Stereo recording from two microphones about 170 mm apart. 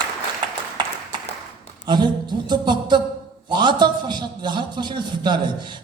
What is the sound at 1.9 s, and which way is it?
A man's voice, 25° right (ahead or behind).